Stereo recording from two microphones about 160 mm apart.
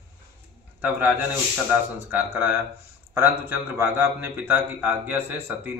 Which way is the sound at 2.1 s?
15° right (ahead or behind).